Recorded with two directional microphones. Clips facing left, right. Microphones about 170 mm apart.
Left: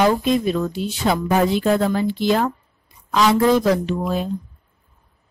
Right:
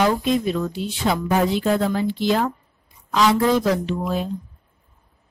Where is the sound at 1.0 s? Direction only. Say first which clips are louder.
Left 2 dB; 50° left (ahead or behind).